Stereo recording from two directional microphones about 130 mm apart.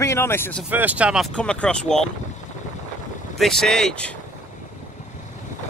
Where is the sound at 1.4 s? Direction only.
5° left (ahead or behind).